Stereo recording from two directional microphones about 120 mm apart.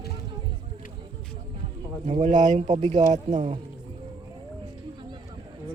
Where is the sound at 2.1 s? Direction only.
55° right (ahead or behind).